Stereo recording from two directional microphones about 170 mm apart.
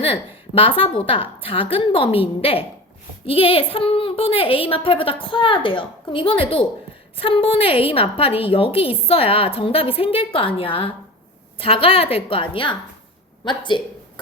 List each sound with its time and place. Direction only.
0.0 s a woman's voice: 35° left (ahead or behind)